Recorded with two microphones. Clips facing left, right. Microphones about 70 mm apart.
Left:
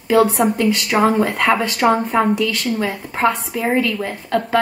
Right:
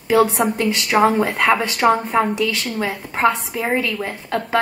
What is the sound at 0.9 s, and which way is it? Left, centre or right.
Speech, centre.